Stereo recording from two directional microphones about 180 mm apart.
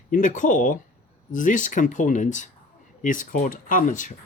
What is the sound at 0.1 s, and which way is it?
Speech, 45° left (ahead or behind).